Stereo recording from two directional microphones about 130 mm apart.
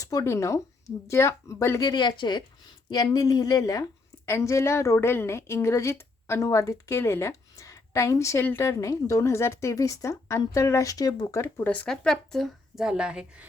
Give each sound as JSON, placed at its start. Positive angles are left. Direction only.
{"t": 0.0, "sound": "a woman's voice", "side_deg": 25}
{"t": 1.9, "sound": "a woman's voice", "side_deg": 35}